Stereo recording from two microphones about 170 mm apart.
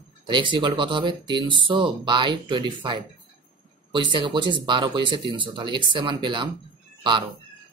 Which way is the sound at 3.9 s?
30° right (ahead or behind).